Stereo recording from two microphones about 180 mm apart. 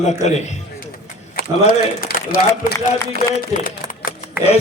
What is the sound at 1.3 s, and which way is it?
A man's voice, 50° left (ahead or behind).